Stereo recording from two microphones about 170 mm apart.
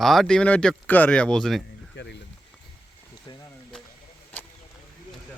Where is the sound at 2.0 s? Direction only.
90° left.